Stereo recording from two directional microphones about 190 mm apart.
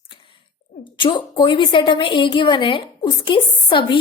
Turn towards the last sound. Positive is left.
turn(degrees=25)  # may be behind; listen again after turning